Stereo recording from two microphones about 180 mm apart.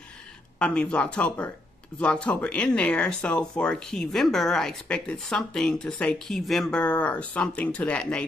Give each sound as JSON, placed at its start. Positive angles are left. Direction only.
{"t": 0.6, "sound": "speech", "side_deg": 5}